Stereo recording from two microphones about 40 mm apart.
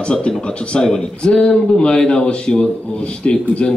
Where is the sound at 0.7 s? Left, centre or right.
Centre.